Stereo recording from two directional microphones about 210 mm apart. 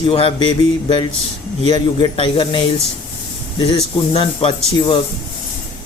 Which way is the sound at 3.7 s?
25° left (ahead or behind).